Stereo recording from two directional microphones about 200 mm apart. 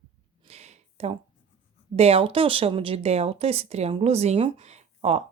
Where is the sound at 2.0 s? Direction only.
30° right (ahead or behind).